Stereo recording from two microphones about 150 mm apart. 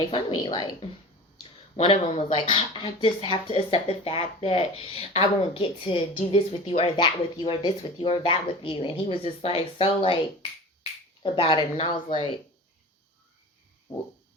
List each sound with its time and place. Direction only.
0.1 s speech: 30° left (ahead or behind)
11.2 s speech: 30° left (ahead or behind)